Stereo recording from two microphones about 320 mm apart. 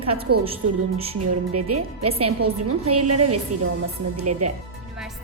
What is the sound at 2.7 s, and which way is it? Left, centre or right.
A woman's voice, right.